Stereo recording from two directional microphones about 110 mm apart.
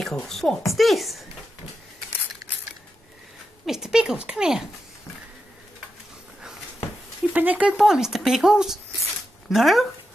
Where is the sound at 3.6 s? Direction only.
5° right (ahead or behind).